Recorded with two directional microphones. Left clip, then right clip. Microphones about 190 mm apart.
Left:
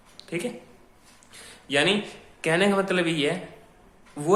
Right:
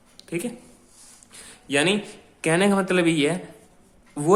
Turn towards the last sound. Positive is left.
turn(degrees=-35)  # may be behind; listen again after turning